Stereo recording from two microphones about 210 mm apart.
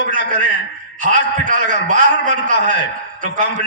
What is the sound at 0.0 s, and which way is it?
A man's voice, 40° right (ahead or behind).